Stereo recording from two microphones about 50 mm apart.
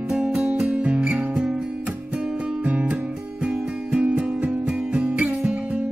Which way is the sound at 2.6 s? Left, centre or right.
Right.